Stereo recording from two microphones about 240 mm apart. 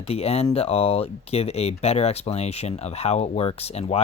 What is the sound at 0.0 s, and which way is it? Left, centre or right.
Speech, left.